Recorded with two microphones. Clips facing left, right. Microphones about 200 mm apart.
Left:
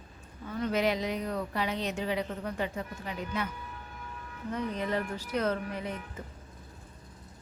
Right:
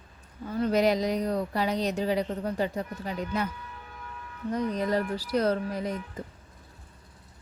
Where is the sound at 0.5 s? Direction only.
35° right (ahead or behind).